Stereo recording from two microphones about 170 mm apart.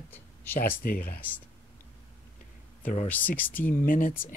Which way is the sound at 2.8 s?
40° left (ahead or behind).